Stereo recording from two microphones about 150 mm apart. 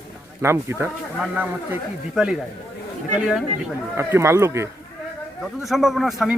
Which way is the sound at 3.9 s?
15° right (ahead or behind).